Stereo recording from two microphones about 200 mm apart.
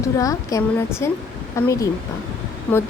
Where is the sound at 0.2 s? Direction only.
15° left (ahead or behind).